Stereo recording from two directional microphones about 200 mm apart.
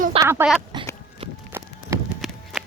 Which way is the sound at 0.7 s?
20° right (ahead or behind).